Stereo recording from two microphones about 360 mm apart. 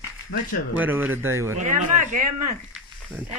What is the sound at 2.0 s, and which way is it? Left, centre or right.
Speech, right.